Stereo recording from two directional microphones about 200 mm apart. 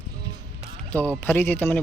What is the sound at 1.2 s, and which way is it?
Speech, 10° left (ahead or behind).